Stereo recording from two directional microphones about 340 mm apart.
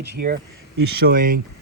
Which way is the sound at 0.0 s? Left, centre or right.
Right.